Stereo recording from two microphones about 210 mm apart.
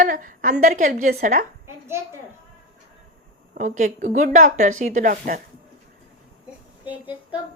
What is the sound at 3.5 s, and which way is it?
A woman's voice, 35° right (ahead or behind).